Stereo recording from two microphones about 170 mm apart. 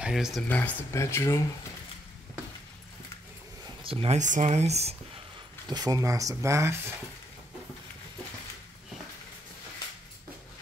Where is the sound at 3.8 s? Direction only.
35° right (ahead or behind).